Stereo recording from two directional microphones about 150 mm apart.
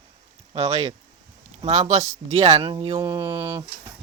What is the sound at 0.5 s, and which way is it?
Speech, 45° right (ahead or behind).